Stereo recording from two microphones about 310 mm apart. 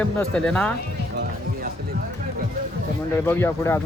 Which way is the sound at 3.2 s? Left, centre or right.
Centre.